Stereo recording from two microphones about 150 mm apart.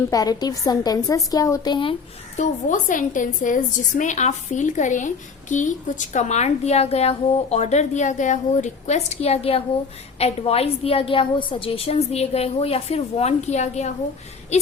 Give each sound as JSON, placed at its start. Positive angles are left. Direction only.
{"t": 0.1, "sound": "a woman's voice", "side_deg": 25}
{"t": 2.3, "sound": "a woman's voice", "side_deg": 55}